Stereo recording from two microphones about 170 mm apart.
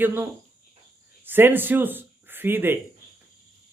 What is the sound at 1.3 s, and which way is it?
Speech, 10° right (ahead or behind).